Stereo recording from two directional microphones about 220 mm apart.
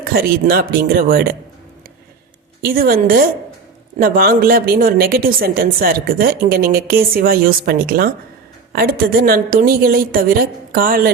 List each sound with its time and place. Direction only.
0.0 s speech: 45° right (ahead or behind)
2.6 s a woman's voice: 40° right (ahead or behind)